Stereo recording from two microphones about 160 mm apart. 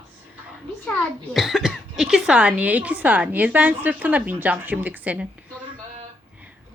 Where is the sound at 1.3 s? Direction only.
Centre (ahead or behind).